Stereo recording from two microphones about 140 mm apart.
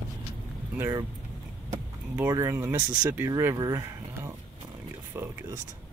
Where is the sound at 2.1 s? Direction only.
20° right (ahead or behind).